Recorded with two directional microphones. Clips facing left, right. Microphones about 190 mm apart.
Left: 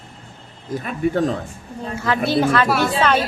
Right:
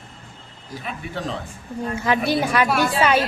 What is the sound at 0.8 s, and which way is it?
Speech, 45° left (ahead or behind).